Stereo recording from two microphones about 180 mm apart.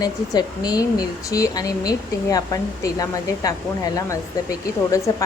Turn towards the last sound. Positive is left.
turn(degrees=20)  # may be behind; listen again after turning